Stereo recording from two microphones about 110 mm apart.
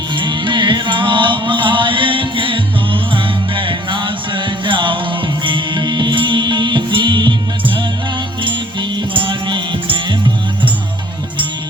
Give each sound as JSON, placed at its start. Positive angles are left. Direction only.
{"t": 0.2, "sound": "music", "side_deg": -45}